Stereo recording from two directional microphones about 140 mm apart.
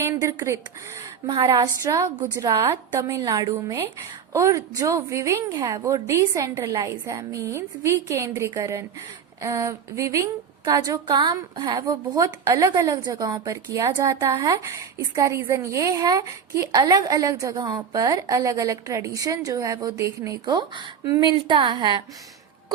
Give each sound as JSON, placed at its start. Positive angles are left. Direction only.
{"t": 0.2, "sound": "a woman's voice", "side_deg": -20}